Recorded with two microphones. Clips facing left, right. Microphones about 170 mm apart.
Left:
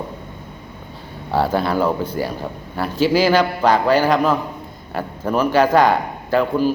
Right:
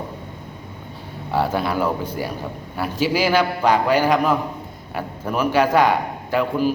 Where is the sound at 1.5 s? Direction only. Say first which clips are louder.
Left 3 dB; 35° left (ahead or behind).